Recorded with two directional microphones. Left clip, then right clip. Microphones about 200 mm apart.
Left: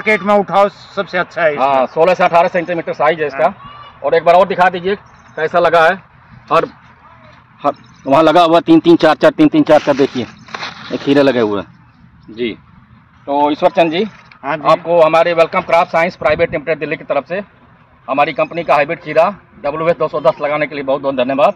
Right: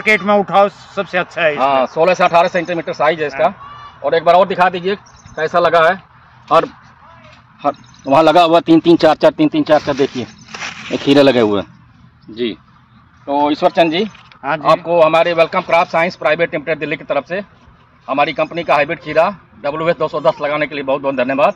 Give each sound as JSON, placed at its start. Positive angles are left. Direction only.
{"t": 0.0, "sound": "speech", "side_deg": -15}
{"t": 1.6, "sound": "speech", "side_deg": 10}
{"t": 8.0, "sound": "speech", "side_deg": 20}
{"t": 9.4, "sound": "speech", "side_deg": 30}
{"t": 10.9, "sound": "speech", "side_deg": -25}
{"t": 13.3, "sound": "a man's voice", "side_deg": 10}